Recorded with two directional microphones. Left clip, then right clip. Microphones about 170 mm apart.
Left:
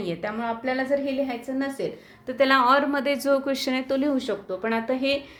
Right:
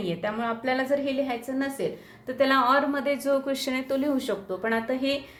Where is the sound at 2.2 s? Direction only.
25° left (ahead or behind).